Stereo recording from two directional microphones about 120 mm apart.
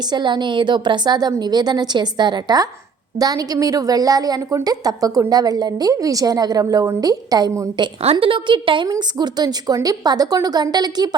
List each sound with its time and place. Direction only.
0.1 s a woman's voice: 40° right (ahead or behind)
8.0 s a woman's voice: 50° right (ahead or behind)